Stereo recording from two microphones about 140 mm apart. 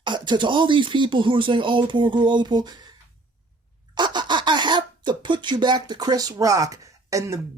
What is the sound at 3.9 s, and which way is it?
Speech, 30° right (ahead or behind).